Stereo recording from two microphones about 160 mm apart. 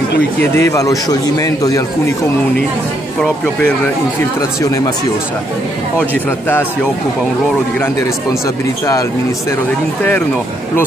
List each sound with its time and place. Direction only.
0.4 s a man's voice: 20° left (ahead or behind)
4.2 s a man's voice: 20° left (ahead or behind)
7.8 s a man's voice: 20° left (ahead or behind)